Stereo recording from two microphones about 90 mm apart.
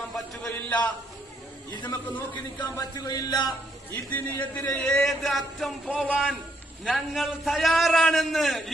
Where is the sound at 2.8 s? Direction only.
45° left (ahead or behind).